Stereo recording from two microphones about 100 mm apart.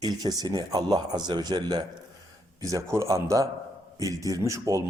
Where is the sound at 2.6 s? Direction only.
30° right (ahead or behind).